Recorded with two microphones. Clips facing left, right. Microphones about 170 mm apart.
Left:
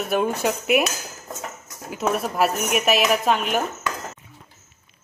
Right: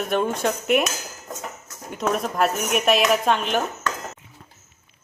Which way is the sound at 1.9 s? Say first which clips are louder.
Even; 5° left (ahead or behind).